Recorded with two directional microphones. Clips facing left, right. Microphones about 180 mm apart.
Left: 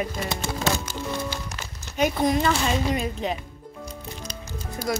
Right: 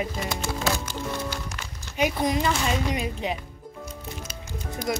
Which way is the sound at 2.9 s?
10° right (ahead or behind).